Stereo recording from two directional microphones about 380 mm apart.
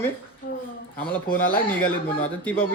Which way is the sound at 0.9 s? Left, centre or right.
Centre.